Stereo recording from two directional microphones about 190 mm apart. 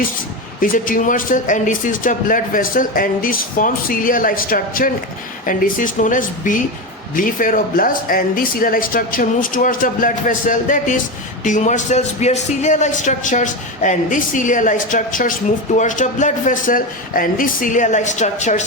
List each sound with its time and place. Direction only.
0.6 s a man's voice: 45° left (ahead or behind)